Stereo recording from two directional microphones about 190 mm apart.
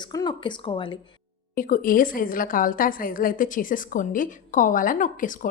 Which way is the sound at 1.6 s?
45° left (ahead or behind).